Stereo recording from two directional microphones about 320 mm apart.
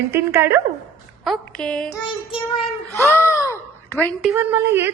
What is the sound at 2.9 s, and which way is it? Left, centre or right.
A child's voice, centre.